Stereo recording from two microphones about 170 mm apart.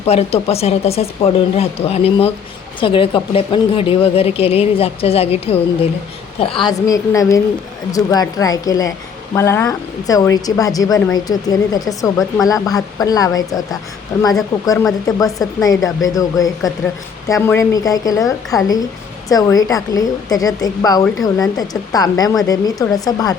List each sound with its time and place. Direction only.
0.0 s speech: 35° left (ahead or behind)
6.6 s speech: 20° left (ahead or behind)